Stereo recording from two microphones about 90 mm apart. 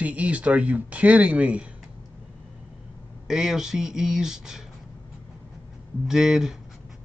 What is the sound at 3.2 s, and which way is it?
Speech, 5° right (ahead or behind).